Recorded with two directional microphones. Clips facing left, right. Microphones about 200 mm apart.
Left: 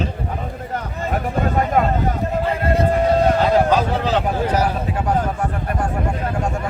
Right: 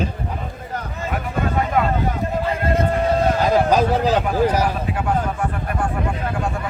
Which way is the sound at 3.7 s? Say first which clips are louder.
Right 1 dB; 40° right (ahead or behind).